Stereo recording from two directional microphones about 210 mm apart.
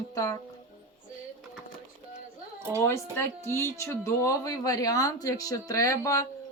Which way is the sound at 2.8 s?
10° left (ahead or behind).